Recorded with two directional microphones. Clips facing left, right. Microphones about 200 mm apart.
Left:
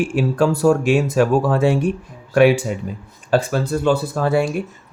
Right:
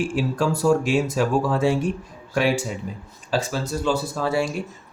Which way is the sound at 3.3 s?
55° left (ahead or behind).